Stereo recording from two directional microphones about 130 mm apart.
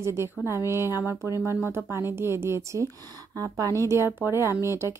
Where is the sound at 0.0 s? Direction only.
20° right (ahead or behind).